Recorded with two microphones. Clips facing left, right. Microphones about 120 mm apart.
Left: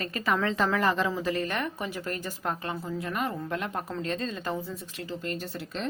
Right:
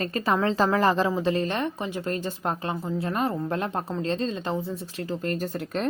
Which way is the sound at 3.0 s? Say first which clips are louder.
Right 6 dB; 30° right (ahead or behind).